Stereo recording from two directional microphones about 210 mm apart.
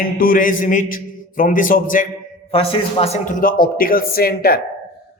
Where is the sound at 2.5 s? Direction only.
25° left (ahead or behind); by 4.6 s 45° left (ahead or behind).